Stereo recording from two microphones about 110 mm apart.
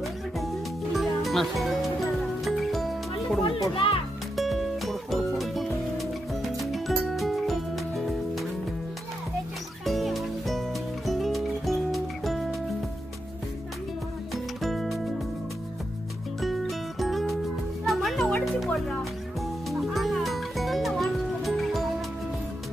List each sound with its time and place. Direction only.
0.9 s music: centre (ahead or behind)
3.8 s a child's voice: 55° left (ahead or behind)
4.4 s music: centre (ahead or behind)
9.8 s music: centre (ahead or behind)
14.3 s music: centre (ahead or behind)
16.3 s music: centre (ahead or behind)